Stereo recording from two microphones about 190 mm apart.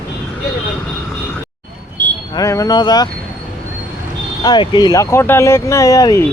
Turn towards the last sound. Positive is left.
turn(degrees=15)  # may be behind; listen again after turning